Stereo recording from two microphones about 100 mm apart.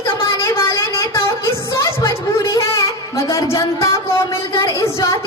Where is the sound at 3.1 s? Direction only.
30° left (ahead or behind).